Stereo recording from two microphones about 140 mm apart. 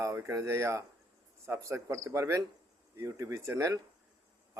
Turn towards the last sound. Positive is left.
turn(degrees=-20)  # may be behind; listen again after turning